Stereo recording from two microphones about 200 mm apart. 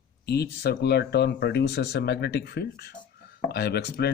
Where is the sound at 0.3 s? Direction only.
55° left (ahead or behind).